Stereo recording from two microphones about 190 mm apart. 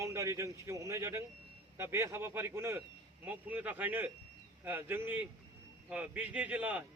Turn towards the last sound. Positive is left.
turn(degrees=-10)  # may be behind; listen again after turning